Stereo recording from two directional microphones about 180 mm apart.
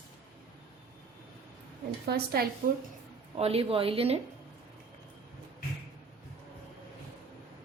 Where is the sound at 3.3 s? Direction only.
35° right (ahead or behind).